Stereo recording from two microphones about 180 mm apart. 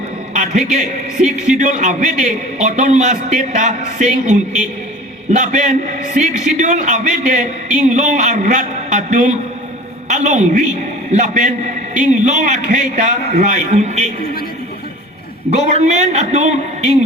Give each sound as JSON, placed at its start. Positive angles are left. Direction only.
{"t": 0.3, "sound": "a man's voice", "side_deg": -40}
{"t": 15.4, "sound": "a man's voice", "side_deg": -40}